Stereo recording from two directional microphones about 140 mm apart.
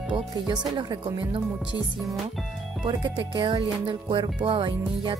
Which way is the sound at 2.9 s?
30° right (ahead or behind).